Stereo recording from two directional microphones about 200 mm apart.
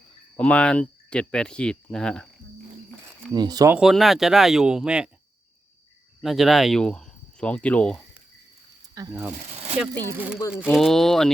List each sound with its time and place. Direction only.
0.3 s speech: 5° left (ahead or behind)
3.3 s speech: 20° right (ahead or behind)
3.8 s speech: centre (ahead or behind)
6.2 s speech: centre (ahead or behind)
10.0 s speech: 10° right (ahead or behind)